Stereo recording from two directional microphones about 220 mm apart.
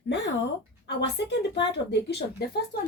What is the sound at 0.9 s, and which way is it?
A woman's voice, 50° left (ahead or behind).